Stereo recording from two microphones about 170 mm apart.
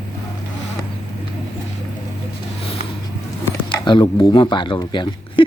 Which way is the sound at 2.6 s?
35° left (ahead or behind).